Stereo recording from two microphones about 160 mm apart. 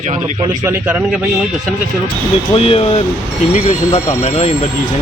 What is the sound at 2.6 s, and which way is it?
Speech, 35° left (ahead or behind).